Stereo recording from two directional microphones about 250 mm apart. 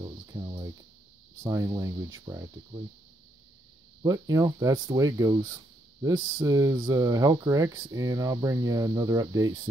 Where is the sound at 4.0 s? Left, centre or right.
Centre.